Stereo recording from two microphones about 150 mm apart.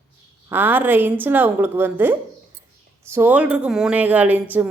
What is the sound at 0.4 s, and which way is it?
A woman's voice, 10° right (ahead or behind).